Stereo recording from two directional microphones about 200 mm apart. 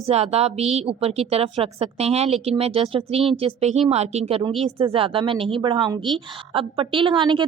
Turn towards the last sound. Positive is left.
turn(degrees=-25)  # may be behind; listen again after turning